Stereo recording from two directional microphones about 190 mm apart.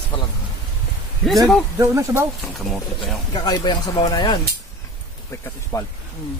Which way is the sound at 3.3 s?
20° left (ahead or behind).